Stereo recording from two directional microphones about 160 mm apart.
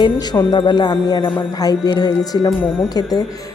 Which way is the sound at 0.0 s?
30° left (ahead or behind).